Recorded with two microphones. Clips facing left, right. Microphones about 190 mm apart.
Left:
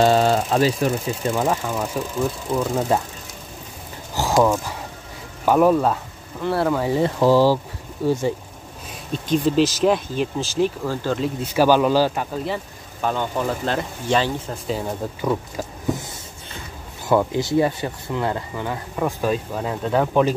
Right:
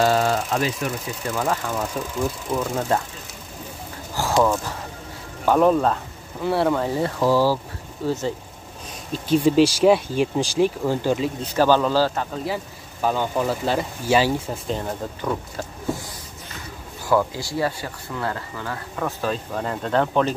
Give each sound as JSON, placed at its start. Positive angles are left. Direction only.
{"t": 0.0, "sound": "speech", "side_deg": 25}
{"t": 1.3, "sound": "speech", "side_deg": 15}
{"t": 4.2, "sound": "a sound", "side_deg": 20}
{"t": 5.4, "sound": "speech", "side_deg": 10}
{"t": 6.9, "sound": "speech", "side_deg": 20}
{"t": 8.0, "sound": "speech", "side_deg": 10}
{"t": 9.3, "sound": "speech", "side_deg": -10}
{"t": 11.5, "sound": "speech", "side_deg": 10}
{"t": 13.0, "sound": "speech", "side_deg": -5}
{"t": 14.7, "sound": "speech", "side_deg": 5}
{"t": 17.1, "sound": "speech", "side_deg": 20}